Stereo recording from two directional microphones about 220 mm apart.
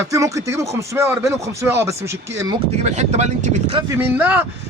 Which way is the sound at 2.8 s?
30° right (ahead or behind).